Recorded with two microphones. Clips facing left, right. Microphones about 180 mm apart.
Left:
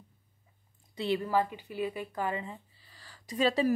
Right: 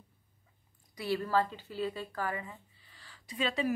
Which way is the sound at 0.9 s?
20° left (ahead or behind).